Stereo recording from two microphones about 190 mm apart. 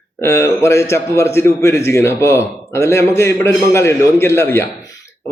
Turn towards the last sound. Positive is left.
turn(degrees=15)  # may be behind; listen again after turning